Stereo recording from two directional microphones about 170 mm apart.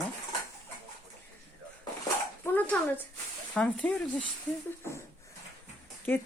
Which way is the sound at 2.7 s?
10° left (ahead or behind).